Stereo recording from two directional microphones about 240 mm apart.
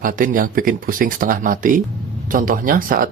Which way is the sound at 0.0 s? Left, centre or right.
Right.